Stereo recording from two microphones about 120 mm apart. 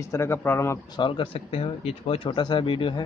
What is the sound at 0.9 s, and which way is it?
Speech, 45° left (ahead or behind).